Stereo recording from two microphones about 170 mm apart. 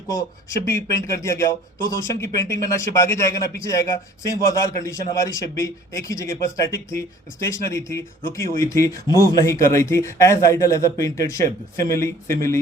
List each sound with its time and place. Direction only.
0.1 s a man's voice: 15° left (ahead or behind)